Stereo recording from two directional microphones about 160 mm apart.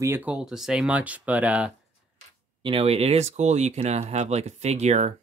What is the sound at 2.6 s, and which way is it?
Speech, 35° right (ahead or behind).